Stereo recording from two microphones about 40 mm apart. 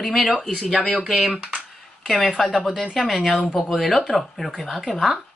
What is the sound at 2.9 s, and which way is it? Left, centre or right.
Speech, centre.